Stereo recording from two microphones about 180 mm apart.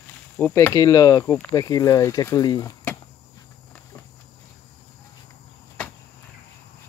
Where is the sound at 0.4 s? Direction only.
10° left (ahead or behind).